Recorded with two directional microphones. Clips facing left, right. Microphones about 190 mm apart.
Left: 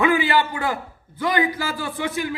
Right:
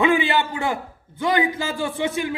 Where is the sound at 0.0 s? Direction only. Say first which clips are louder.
Even; 20° right (ahead or behind).